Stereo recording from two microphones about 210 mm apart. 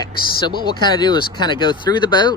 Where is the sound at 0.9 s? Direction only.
20° left (ahead or behind).